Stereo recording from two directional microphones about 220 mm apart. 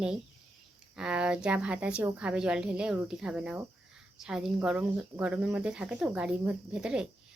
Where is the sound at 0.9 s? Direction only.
5° right (ahead or behind).